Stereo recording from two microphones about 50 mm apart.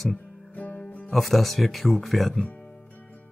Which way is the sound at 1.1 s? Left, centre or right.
Centre.